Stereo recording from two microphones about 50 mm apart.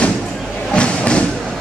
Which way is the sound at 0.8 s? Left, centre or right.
Left.